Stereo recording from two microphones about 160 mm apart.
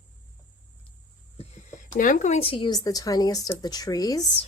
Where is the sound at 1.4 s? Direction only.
45° left (ahead or behind).